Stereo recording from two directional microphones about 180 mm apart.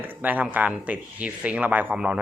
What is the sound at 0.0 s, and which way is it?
Speech, 10° right (ahead or behind).